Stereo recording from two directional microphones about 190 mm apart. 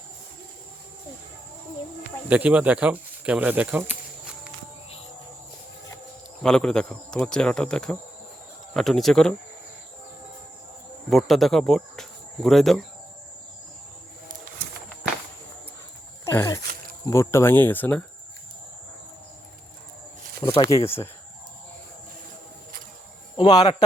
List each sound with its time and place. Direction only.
2.3 s speech: 5° right (ahead or behind)
6.4 s speech: 5° left (ahead or behind)
11.1 s speech: centre (ahead or behind)
16.2 s a sound: 15° left (ahead or behind)
17.1 s speech: 15° left (ahead or behind)
20.4 s speech: 20° left (ahead or behind)
23.4 s a man's voice: 20° left (ahead or behind)